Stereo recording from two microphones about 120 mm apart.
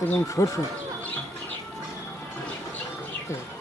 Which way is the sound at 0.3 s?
25° left (ahead or behind).